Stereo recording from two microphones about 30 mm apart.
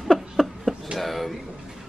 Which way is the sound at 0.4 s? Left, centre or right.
Centre.